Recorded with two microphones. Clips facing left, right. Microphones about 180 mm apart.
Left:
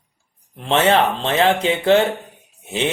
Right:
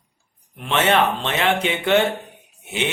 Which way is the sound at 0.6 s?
35° left (ahead or behind).